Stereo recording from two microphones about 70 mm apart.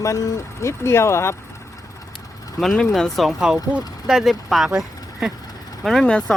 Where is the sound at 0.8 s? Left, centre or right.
Left.